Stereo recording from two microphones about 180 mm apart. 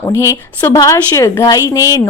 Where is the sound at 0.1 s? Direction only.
15° left (ahead or behind).